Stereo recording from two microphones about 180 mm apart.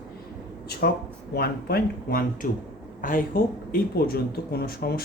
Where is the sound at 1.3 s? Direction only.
60° left (ahead or behind).